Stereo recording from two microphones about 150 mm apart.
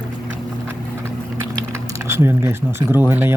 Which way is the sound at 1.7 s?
20° right (ahead or behind).